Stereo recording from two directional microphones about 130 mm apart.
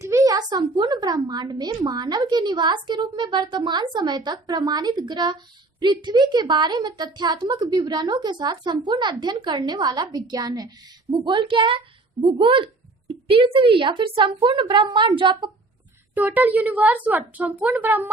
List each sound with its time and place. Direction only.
0.0 s a woman's voice: 25° right (ahead or behind); by 15.4 s 40° right (ahead or behind)
16.1 s a woman's voice: 10° right (ahead or behind)